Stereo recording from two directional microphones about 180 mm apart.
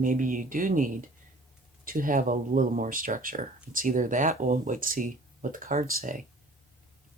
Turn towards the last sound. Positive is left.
turn(degrees=-45)  # may be behind; listen again after turning